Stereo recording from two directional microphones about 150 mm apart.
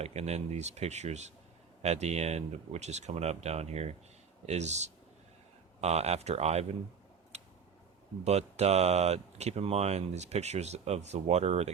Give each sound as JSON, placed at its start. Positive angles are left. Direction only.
{"t": 0.0, "sound": "speech", "side_deg": -45}
{"t": 7.3, "sound": "a sound", "side_deg": -50}
{"t": 8.2, "sound": "speech", "side_deg": -45}